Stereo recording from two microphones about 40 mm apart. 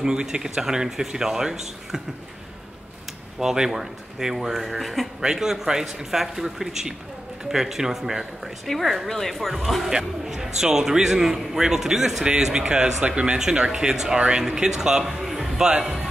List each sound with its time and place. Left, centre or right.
0.0 s a man's voice: centre
3.3 s a man's voice: centre
5.2 s a man's voice: centre
8.6 s a woman's voice: centre
9.8 s a man's voice: centre